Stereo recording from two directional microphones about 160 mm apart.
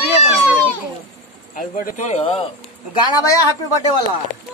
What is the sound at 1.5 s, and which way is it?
Speech, 55° left (ahead or behind).